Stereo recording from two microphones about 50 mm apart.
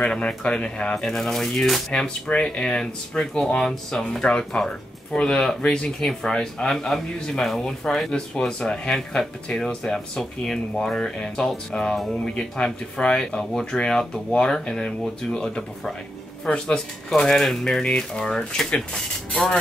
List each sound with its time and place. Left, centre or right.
0.0 s speech: centre
0.9 s speech: centre
4.3 s speech: left